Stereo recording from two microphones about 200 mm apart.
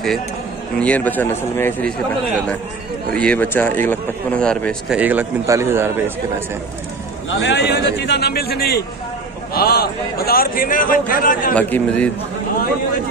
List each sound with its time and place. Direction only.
0.7 s a man's voice: 5° left (ahead or behind)
3.1 s a man's voice: 5° left (ahead or behind)
4.9 s a man's voice: 10° right (ahead or behind)
7.2 s a man's voice: 60° left (ahead or behind); by 11.5 s 40° left (ahead or behind)
11.5 s a man's voice: 5° left (ahead or behind)